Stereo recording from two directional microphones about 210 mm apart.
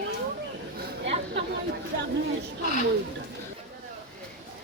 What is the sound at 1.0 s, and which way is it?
Chatter, 55° right (ahead or behind).